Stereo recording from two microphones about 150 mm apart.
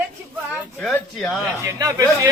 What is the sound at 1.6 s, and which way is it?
Speech, 20° right (ahead or behind).